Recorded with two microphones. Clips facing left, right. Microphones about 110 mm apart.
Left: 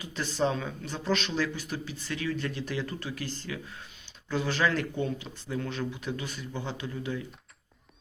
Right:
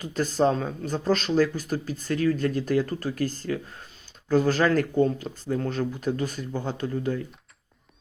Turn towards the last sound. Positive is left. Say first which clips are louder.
# right 7 dB
turn(degrees=-45)  # may be behind; listen again after turning